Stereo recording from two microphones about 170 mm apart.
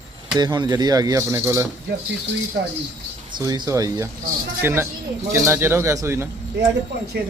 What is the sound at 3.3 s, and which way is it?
Speech, 25° right (ahead or behind).